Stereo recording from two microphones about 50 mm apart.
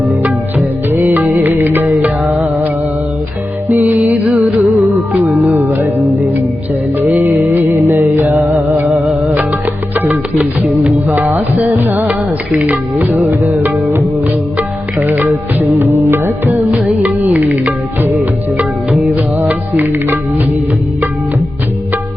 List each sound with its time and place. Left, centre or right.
0.9 s music of bollywood: right
1.4 s music: right
3.7 s music: right
7.0 s music: right
13.2 s music: right
15.8 s music: right
17.0 s music: right